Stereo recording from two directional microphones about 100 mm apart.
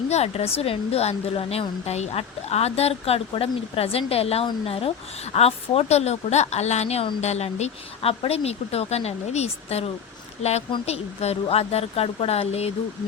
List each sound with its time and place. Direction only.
0.1 s a woman's voice: 90° left